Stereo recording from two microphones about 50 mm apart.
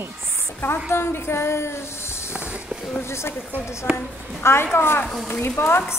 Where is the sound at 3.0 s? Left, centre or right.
Left.